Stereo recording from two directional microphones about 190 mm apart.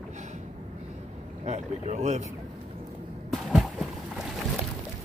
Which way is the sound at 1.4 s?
35° right (ahead or behind).